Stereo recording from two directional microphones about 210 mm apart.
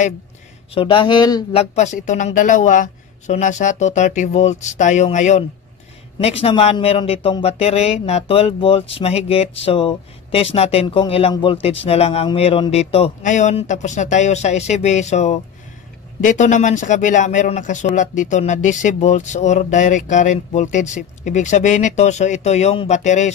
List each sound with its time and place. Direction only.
0.7 s speech: 25° left (ahead or behind)
1.6 s speech: 35° left (ahead or behind)